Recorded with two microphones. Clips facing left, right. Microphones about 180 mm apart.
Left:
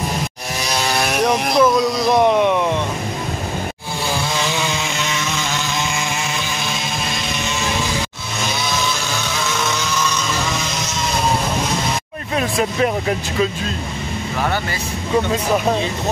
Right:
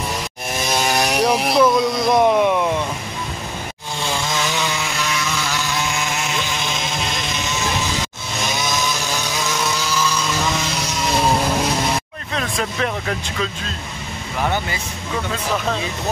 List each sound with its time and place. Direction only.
0.7 s a sound: 20° right (ahead or behind)
1.6 s speech: centre (ahead or behind)
2.2 s boat: 10° right (ahead or behind)
4.1 s chainsaw: 10° left (ahead or behind)
12.4 s speech: 10° left (ahead or behind)
15.5 s speech: 20° left (ahead or behind)